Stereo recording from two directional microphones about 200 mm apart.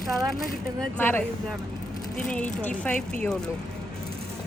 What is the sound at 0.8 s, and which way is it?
A woman's voice, 10° left (ahead or behind).